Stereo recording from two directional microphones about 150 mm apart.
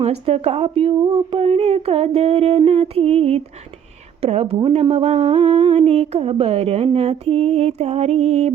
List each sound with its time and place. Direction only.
0.0 s speech: 40° right (ahead or behind)